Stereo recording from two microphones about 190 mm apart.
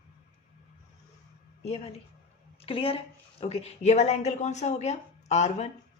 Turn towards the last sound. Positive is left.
turn(degrees=35)  # may be behind; listen again after turning